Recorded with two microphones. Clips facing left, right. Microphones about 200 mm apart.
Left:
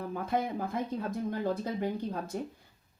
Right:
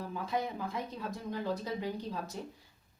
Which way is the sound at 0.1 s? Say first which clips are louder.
Left 4 dB; 50° left (ahead or behind).